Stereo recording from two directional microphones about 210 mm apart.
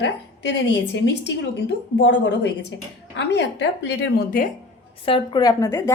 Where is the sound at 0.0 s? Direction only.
55° left (ahead or behind).